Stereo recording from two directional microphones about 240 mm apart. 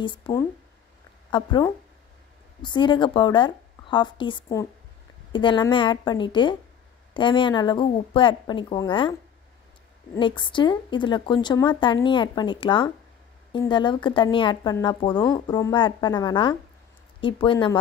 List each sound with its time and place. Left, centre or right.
0.0 s speech: centre
10.1 s speech: centre